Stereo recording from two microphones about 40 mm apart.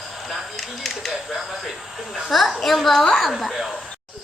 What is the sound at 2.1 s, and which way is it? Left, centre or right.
A woman's voice, centre.